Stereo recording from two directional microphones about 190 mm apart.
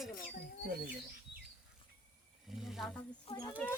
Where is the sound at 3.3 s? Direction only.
20° left (ahead or behind).